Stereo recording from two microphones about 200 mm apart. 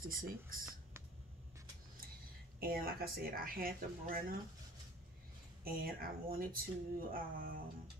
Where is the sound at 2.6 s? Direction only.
50° right (ahead or behind).